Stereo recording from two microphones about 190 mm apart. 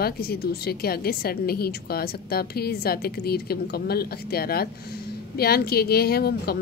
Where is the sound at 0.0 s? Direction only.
55° left (ahead or behind).